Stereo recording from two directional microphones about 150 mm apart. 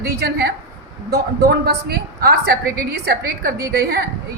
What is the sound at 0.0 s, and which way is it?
A woman's voice, 90° right.